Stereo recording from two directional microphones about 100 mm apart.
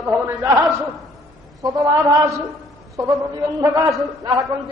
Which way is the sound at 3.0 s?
35° right (ahead or behind).